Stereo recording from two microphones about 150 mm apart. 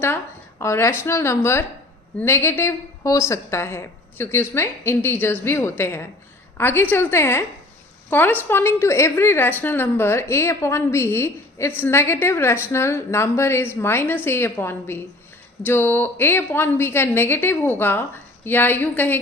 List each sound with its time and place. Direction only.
0.6 s a woman's voice: 20° left (ahead or behind)